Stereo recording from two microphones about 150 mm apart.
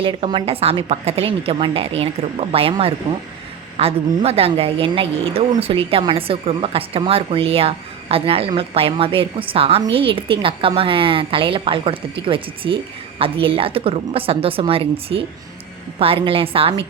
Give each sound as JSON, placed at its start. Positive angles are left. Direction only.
{"t": 0.0, "sound": "a woman's voice", "side_deg": -35}